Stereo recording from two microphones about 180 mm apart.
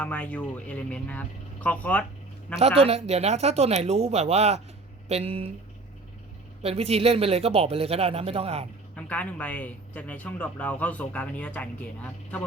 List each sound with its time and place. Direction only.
0.0 s a man's voice: 5° left (ahead or behind)
2.6 s speech: 35° right (ahead or behind)
6.6 s speech: 35° right (ahead or behind)
9.0 s a man's voice: 10° left (ahead or behind)